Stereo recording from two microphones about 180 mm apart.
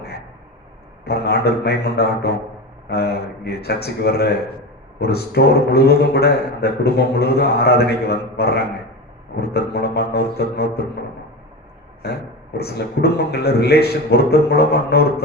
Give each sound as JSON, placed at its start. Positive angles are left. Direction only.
{"t": 1.0, "sound": "a man's voice", "side_deg": 60}
{"t": 12.5, "sound": "a man's voice", "side_deg": 65}